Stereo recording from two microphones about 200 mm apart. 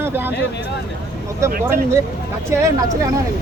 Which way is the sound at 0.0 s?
10° right (ahead or behind).